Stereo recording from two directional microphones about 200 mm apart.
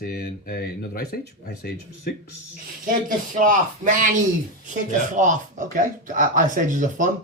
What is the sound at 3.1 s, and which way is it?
Speech, 40° right (ahead or behind).